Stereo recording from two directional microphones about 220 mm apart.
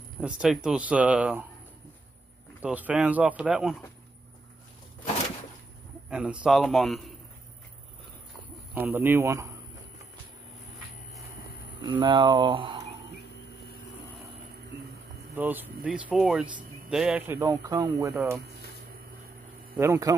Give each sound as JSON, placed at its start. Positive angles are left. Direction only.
{"t": 0.2, "sound": "speech", "side_deg": -5}
{"t": 2.6, "sound": "speech", "side_deg": -5}
{"t": 6.0, "sound": "speech", "side_deg": -5}
{"t": 8.7, "sound": "speech", "side_deg": -10}
{"t": 11.8, "sound": "speech", "side_deg": -20}
{"t": 15.3, "sound": "speech", "side_deg": -10}
{"t": 17.4, "sound": "speech", "side_deg": -15}
{"t": 19.8, "sound": "speech", "side_deg": -15}